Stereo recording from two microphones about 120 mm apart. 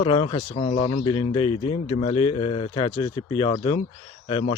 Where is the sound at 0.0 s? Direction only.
45° left (ahead or behind).